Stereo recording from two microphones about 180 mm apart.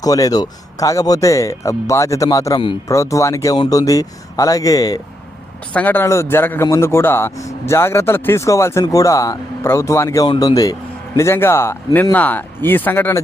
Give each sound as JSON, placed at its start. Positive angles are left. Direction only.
{"t": 0.0, "sound": "a man's voice", "side_deg": 20}